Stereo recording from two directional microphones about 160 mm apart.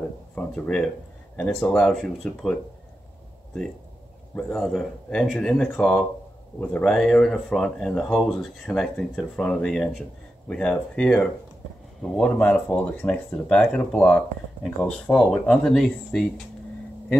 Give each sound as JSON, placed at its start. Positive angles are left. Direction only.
{"t": 0.4, "sound": "speech", "side_deg": 5}
{"t": 4.4, "sound": "speech", "side_deg": 5}